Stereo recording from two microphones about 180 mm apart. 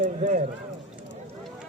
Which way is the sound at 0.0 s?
45° right (ahead or behind).